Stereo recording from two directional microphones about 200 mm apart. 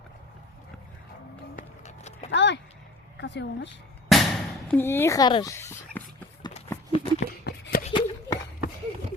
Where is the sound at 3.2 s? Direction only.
60° left (ahead or behind).